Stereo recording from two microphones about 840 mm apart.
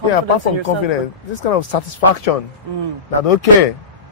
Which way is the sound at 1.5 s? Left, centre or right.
Left.